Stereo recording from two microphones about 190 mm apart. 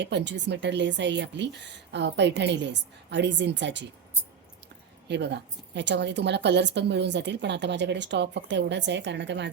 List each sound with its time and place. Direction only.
0.0 s a woman's voice: 65° right (ahead or behind)
5.0 s a woman's voice: 65° right (ahead or behind)